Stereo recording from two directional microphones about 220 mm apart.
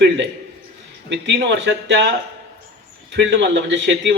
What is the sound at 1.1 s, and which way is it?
A man's voice, 50° right (ahead or behind).